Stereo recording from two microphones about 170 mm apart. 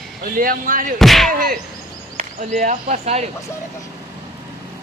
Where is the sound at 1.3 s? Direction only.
55° right (ahead or behind).